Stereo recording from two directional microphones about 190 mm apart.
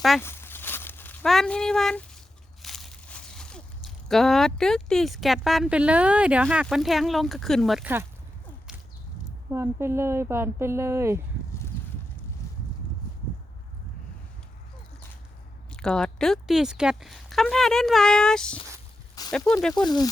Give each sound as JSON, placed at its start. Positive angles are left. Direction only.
{"t": 0.2, "sound": "a sound", "side_deg": 10}
{"t": 2.6, "sound": "speech", "side_deg": 0}
{"t": 9.5, "sound": "speech", "side_deg": -15}
{"t": 12.4, "sound": "boat", "side_deg": 15}
{"t": 15.7, "sound": "speech", "side_deg": 5}
{"t": 19.2, "sound": "a sound", "side_deg": 20}
{"t": 19.7, "sound": "speech", "side_deg": 20}